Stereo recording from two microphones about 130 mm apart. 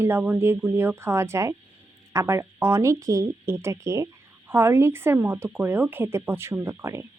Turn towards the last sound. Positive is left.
turn(degrees=-20)  # may be behind; listen again after turning